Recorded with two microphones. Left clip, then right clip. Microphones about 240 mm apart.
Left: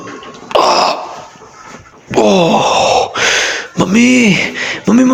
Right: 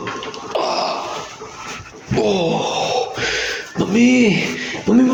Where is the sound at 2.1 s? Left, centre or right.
Left.